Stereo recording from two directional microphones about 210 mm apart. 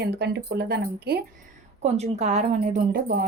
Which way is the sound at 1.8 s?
30° right (ahead or behind).